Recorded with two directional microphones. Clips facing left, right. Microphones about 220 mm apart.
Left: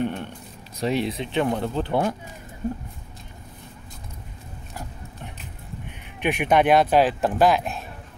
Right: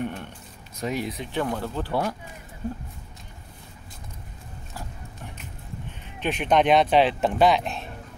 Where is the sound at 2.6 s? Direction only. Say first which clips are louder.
Left 4 dB; 10° left (ahead or behind).